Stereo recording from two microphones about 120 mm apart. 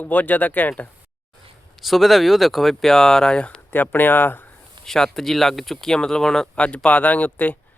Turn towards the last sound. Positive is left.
turn(degrees=15)  # may be behind; listen again after turning